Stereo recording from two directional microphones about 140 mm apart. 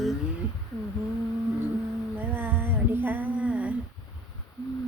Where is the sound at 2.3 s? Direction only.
15° right (ahead or behind).